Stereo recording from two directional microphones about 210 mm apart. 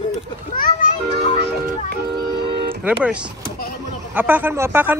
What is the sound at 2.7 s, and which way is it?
A man's voice, 5° right (ahead or behind).